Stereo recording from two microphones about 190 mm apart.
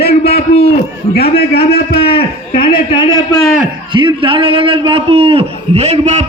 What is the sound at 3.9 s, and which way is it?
A man's voice, 25° right (ahead or behind).